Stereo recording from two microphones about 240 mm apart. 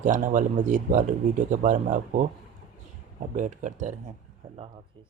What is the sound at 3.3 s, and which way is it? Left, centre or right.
Speech, right.